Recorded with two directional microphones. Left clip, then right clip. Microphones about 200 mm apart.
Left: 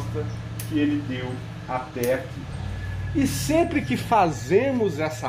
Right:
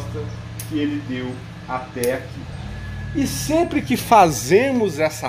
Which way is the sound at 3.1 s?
25° right (ahead or behind).